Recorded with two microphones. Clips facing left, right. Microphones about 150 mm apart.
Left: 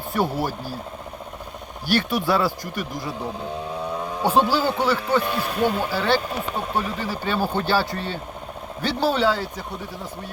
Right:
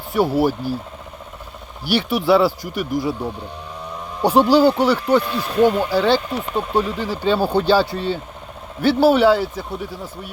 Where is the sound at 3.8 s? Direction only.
65° left (ahead or behind).